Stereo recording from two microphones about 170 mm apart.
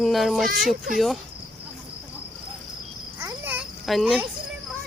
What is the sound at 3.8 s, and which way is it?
Speech, centre (ahead or behind).